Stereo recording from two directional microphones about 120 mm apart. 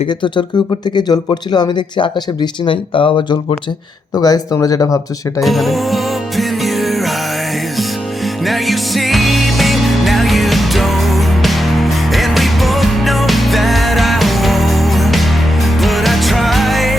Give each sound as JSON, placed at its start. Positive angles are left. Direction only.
{"t": 0.9, "sound": "speech", "side_deg": 35}
{"t": 4.2, "sound": "speech", "side_deg": 30}
{"t": 5.4, "sound": "music", "side_deg": 0}
{"t": 8.4, "sound": "music", "side_deg": 0}